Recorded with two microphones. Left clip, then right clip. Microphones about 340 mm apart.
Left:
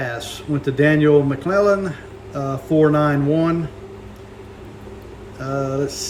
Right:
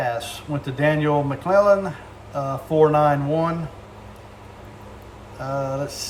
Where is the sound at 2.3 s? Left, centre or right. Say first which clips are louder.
Left 2 dB; right.